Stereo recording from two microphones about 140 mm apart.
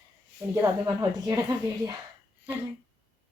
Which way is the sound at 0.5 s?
20° right (ahead or behind).